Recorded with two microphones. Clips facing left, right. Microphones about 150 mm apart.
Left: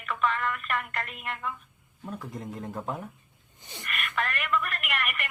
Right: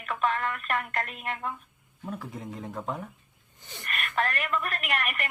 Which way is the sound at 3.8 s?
40° right (ahead or behind).